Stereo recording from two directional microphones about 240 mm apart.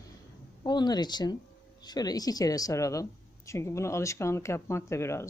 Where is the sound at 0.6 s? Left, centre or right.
Centre.